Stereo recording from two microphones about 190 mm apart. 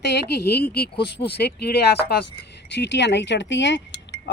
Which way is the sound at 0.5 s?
55° left (ahead or behind).